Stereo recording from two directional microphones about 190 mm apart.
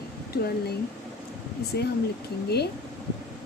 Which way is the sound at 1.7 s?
55° left (ahead or behind).